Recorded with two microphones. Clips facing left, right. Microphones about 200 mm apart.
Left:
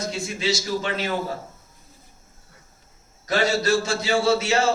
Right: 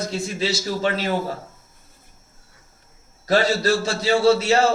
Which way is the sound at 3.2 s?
35° right (ahead or behind).